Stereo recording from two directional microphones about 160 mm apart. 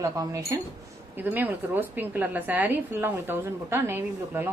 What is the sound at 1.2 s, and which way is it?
A woman's voice, 10° right (ahead or behind).